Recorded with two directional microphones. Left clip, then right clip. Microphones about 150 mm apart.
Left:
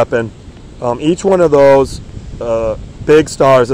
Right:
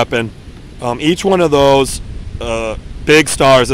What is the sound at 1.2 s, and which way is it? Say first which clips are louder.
Speech: left 3 dB; 25° right (ahead or behind).